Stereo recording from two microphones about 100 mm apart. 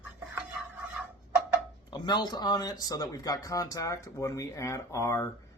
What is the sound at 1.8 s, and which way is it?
Speech, 45° left (ahead or behind).